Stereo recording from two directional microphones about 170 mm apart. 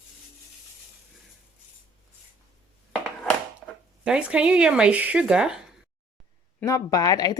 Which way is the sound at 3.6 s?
5° left (ahead or behind).